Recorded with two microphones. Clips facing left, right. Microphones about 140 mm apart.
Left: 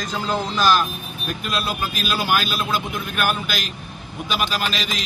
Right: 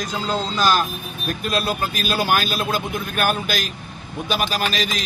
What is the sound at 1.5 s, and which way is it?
A man's voice, 40° right (ahead or behind).